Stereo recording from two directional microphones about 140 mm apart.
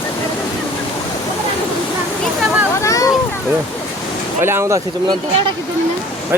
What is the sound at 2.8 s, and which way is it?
Speech, 25° left (ahead or behind).